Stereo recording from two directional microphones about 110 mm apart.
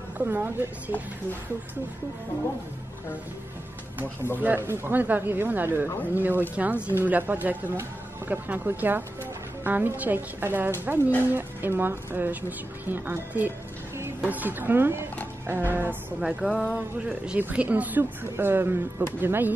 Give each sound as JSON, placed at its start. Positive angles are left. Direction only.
{"t": 0.2, "sound": "speech", "side_deg": -20}
{"t": 4.4, "sound": "speech", "side_deg": -20}
{"t": 16.2, "sound": "music", "side_deg": -5}
{"t": 17.1, "sound": "speech", "side_deg": -10}